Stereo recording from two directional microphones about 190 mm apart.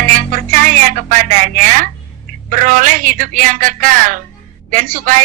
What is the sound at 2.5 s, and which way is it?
A woman's voice, 45° right (ahead or behind).